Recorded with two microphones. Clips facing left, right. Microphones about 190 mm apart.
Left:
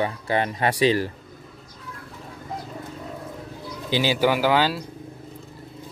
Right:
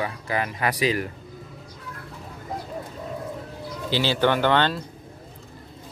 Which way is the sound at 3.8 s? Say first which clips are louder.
Left 1 dB; 15° left (ahead or behind).